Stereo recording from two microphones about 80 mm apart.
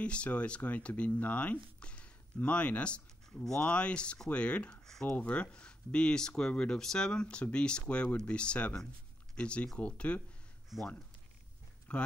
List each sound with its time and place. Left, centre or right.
0.0 s speech: centre
10.7 s speech: centre
11.9 s speech: centre